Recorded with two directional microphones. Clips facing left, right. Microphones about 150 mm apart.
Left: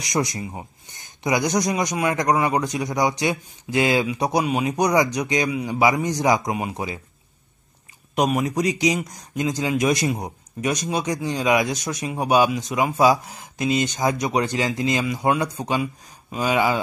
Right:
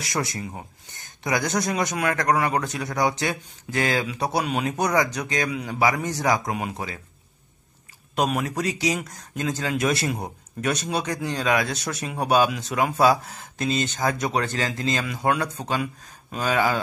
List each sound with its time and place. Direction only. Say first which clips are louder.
0.0 s a man's voice: left 4 dB; 15° left (ahead or behind)
8.2 s a man's voice: left 3 dB; 10° left (ahead or behind)